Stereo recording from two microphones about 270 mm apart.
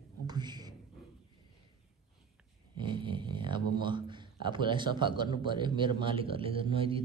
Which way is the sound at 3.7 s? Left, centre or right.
Centre.